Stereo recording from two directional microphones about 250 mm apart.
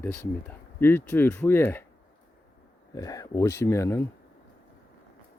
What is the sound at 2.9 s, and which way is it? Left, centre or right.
Speech, centre.